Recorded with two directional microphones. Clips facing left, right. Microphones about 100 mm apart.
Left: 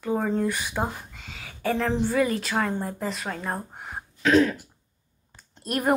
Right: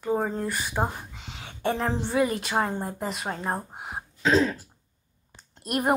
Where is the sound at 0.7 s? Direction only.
15° right (ahead or behind).